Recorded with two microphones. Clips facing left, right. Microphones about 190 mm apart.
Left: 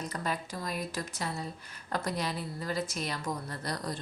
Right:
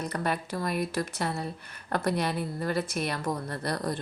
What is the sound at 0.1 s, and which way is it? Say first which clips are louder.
A woman's voice: right 5 dB; 65° right (ahead or behind).